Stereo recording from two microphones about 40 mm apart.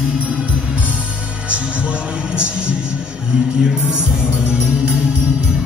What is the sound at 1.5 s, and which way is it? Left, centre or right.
Speech, right.